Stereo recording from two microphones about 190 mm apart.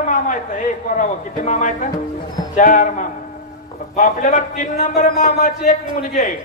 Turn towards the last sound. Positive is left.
turn(degrees=40)  # may be behind; listen again after turning